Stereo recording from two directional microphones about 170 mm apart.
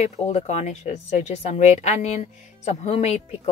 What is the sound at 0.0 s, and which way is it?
A woman's voice, 40° left (ahead or behind).